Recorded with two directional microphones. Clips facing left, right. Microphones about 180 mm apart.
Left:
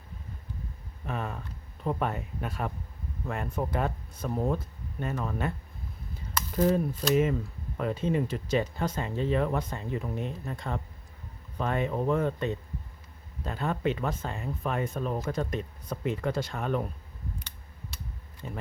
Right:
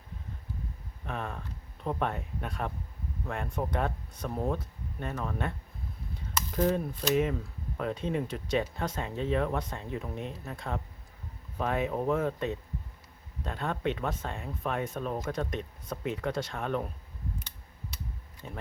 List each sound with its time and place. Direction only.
1.0 s speech: 5° left (ahead or behind)
6.1 s cap gun: 5° left (ahead or behind)
7.8 s speech: centre (ahead or behind)
18.4 s speech: centre (ahead or behind)